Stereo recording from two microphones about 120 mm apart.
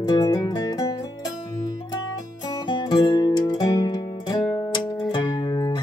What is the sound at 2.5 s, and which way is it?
Music, 40° left (ahead or behind).